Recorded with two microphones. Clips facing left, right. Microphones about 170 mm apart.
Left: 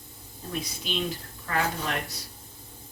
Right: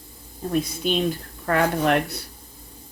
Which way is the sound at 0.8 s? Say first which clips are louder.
Right 8 dB; 50° right (ahead or behind).